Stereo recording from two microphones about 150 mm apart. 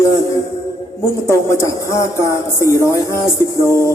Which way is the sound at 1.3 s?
20° left (ahead or behind).